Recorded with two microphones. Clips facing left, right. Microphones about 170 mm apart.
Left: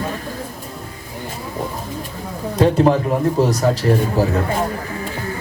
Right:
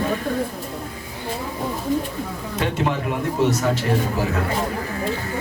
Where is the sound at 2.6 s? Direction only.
35° left (ahead or behind).